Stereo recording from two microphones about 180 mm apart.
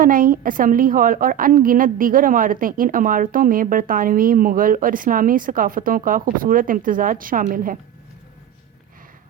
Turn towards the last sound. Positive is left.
turn(degrees=-50)  # may be behind; listen again after turning